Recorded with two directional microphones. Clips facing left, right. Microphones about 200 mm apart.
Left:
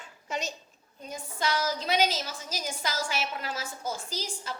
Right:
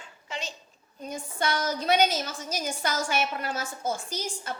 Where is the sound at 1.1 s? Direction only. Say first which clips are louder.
Right 1 dB; 55° right (ahead or behind).